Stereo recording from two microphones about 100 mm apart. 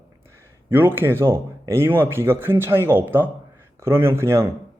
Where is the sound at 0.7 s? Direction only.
20° right (ahead or behind).